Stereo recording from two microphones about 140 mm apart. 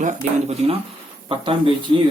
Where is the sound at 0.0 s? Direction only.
55° right (ahead or behind).